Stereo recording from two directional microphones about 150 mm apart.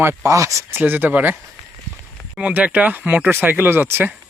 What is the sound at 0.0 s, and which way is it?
Speech, 15° right (ahead or behind).